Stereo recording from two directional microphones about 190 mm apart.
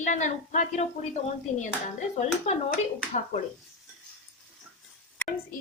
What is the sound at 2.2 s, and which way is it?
Speech, 35° left (ahead or behind).